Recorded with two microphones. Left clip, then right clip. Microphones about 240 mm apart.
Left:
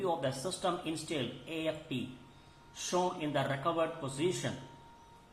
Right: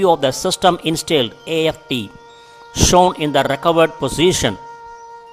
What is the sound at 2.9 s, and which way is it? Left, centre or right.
Speech, right.